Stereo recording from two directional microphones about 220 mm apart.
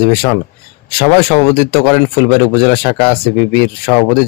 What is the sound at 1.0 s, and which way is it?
Speech, 25° left (ahead or behind).